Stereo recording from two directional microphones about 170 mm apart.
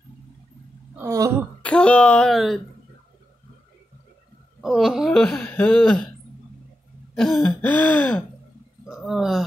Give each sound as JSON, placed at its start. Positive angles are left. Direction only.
{"t": 0.9, "sound": "speech", "side_deg": -20}
{"t": 1.6, "sound": "speech", "side_deg": 5}
{"t": 4.6, "sound": "speech", "side_deg": 0}
{"t": 7.2, "sound": "gasp", "side_deg": 0}
{"t": 8.8, "sound": "speech", "side_deg": 0}